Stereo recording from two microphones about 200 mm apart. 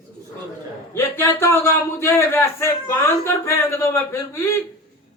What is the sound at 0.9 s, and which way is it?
Speech, 10° left (ahead or behind).